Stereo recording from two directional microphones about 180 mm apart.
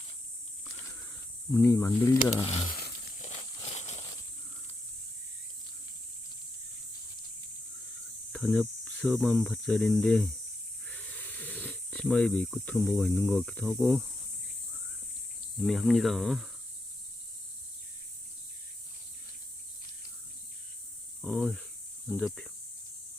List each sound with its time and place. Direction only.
1.5 s speech: 15° left (ahead or behind)
2.3 s speech: 35° left (ahead or behind)
2.6 s a sound: 55° left (ahead or behind)
3.2 s a sound: 40° left (ahead or behind)
8.3 s speech: centre (ahead or behind)
15.5 s speech: centre (ahead or behind)
21.2 s speech: centre (ahead or behind)